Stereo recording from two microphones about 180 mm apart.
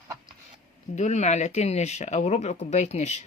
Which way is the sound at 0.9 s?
40° left (ahead or behind).